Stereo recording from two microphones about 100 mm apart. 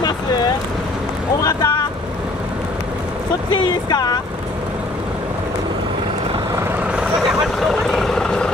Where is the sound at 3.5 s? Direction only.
45° left (ahead or behind).